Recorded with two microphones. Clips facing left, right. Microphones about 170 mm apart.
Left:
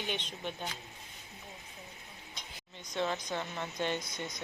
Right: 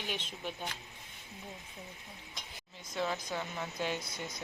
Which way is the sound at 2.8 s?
5° right (ahead or behind).